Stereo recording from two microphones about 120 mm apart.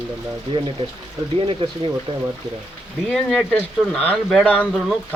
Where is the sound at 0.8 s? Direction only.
45° right (ahead or behind).